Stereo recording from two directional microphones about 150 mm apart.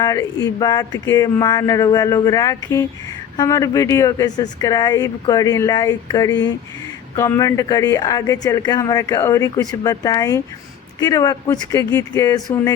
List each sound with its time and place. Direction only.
0.0 s speech: 25° left (ahead or behind)